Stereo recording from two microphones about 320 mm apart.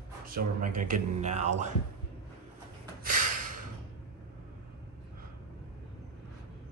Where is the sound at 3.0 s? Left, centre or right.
Right.